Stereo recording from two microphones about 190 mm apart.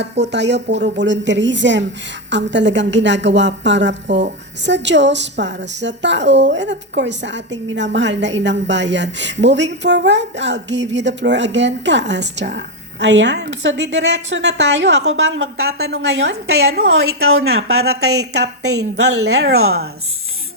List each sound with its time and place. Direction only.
0.0 s a woman's voice: 65° right (ahead or behind)